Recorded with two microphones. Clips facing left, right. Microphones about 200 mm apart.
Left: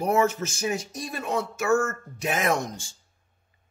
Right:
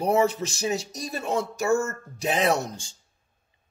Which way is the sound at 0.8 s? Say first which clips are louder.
Right 1 dB; 40° right (ahead or behind).